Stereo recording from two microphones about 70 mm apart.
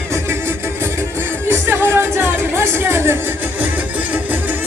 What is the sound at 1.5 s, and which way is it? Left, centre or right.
Music, right.